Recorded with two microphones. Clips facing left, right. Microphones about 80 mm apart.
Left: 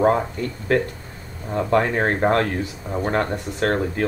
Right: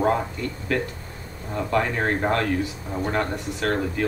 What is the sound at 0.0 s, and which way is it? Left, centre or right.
Speech, left.